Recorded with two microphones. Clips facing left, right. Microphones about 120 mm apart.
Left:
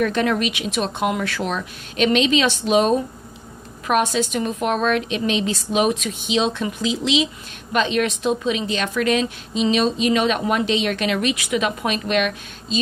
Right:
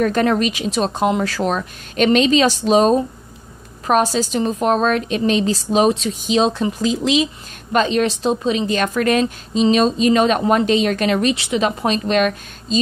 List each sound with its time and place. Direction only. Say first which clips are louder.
0.0 s a woman's voice: right 3 dB; 40° right (ahead or behind)